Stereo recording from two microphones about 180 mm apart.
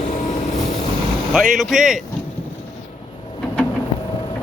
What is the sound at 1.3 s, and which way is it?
Speech, centre (ahead or behind).